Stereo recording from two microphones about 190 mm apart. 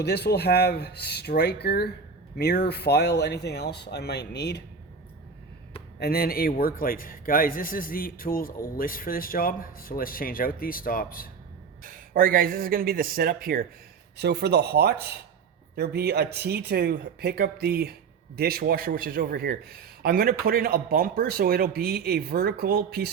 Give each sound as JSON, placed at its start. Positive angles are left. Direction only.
{"t": 0.0, "sound": "speech", "side_deg": 60}
{"t": 6.0, "sound": "a man's voice", "side_deg": 55}
{"t": 11.8, "sound": "a man's voice", "side_deg": -45}